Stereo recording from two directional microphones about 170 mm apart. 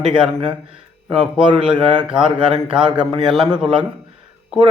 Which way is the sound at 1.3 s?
5° right (ahead or behind).